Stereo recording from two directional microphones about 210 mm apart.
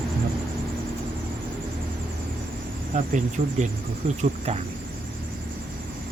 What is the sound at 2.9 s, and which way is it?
Speech, 35° right (ahead or behind).